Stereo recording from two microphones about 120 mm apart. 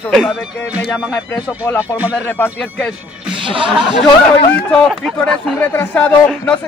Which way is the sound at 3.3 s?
45° right (ahead or behind).